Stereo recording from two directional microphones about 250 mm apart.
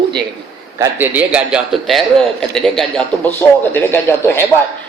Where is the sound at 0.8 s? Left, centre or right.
Centre.